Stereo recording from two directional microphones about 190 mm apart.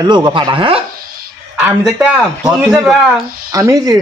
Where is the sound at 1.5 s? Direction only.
5° right (ahead or behind).